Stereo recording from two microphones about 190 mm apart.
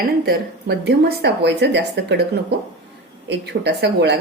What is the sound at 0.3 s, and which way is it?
Speech, 60° right (ahead or behind).